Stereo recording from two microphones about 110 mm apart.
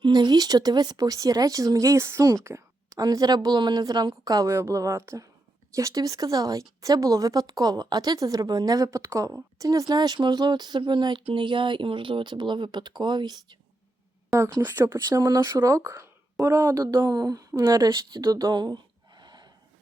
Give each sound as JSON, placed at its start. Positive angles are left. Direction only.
{"t": 0.0, "sound": "speech", "side_deg": -40}
{"t": 14.3, "sound": "speech", "side_deg": -30}